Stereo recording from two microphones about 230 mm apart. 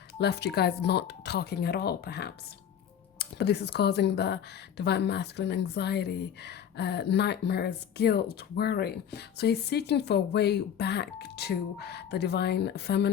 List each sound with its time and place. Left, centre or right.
0.2 s speech: left